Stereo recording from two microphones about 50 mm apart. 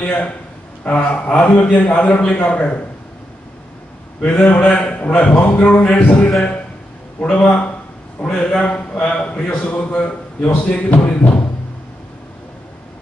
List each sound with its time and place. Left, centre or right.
0.0 s a man's voice: left
4.2 s a man's voice: left
10.4 s speech: left